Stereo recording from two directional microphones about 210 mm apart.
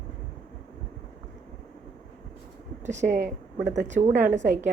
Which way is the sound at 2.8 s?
35° right (ahead or behind).